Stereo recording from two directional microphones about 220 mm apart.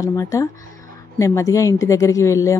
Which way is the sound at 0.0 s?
15° left (ahead or behind).